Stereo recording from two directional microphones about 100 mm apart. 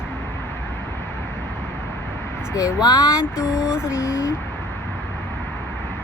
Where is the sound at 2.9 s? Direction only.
40° left (ahead or behind).